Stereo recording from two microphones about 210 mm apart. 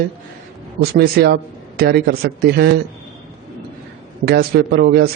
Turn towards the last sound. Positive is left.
turn(degrees=-50)  # may be behind; listen again after turning